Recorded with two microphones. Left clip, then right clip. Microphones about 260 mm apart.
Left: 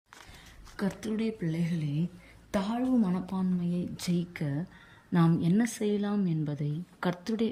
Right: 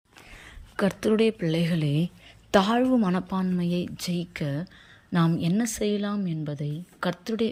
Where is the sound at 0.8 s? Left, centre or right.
Centre.